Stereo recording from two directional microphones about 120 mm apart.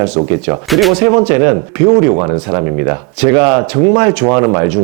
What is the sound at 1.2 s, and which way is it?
Speech, 20° right (ahead or behind).